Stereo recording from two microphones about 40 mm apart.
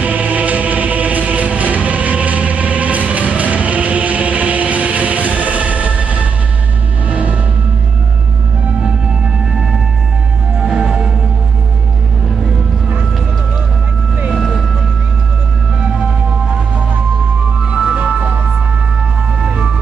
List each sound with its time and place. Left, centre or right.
0.0 s music: right
10.6 s music: centre
14.3 s vehicle: centre
17.6 s music: right
19.4 s music: centre